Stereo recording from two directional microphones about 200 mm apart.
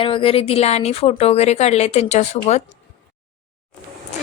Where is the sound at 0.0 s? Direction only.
25° left (ahead or behind).